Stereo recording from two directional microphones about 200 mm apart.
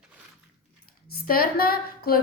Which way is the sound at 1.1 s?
50° left (ahead or behind).